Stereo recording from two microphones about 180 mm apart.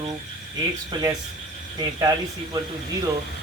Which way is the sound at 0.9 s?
25° right (ahead or behind).